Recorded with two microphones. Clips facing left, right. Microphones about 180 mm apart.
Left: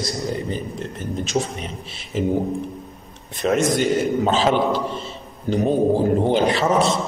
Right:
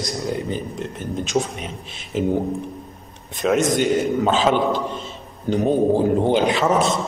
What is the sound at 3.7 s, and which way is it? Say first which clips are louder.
A man's voice: even; centre (ahead or behind).